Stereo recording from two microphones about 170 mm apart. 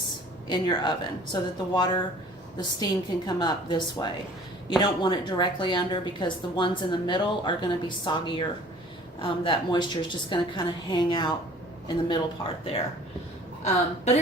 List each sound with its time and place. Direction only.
0.4 s a woman's voice: 25° left (ahead or behind)